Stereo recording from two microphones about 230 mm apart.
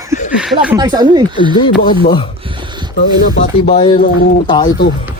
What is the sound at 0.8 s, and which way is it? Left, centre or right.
Speech, centre.